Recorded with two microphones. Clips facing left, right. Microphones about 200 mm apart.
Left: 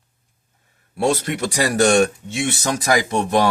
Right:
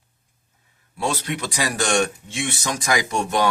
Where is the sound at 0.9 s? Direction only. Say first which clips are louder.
Left 6 dB; 50° left (ahead or behind).